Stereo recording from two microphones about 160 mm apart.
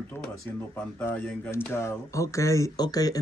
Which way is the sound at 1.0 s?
15° left (ahead or behind).